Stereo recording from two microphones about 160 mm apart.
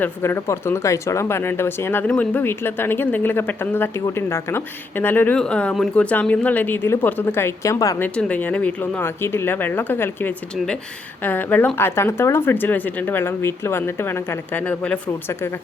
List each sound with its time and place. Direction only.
0.0 s speech: 15° left (ahead or behind)